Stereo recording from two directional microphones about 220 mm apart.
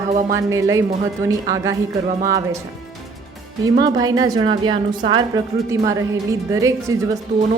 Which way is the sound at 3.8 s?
15° right (ahead or behind).